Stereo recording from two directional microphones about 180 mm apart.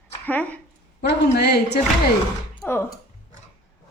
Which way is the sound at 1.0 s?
65° left (ahead or behind).